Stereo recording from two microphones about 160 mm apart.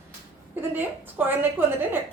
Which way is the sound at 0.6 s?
10° right (ahead or behind).